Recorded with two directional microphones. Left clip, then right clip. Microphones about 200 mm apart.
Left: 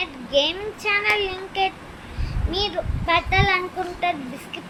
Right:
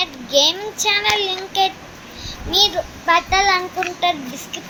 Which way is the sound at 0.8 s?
10° right (ahead or behind).